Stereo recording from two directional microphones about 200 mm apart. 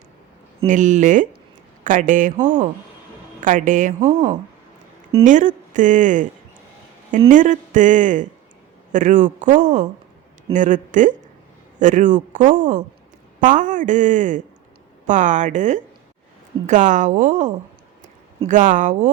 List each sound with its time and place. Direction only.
0.6 s speech: 40° right (ahead or behind)
5.1 s speech: 40° right (ahead or behind)
7.3 s speech: 40° right (ahead or behind)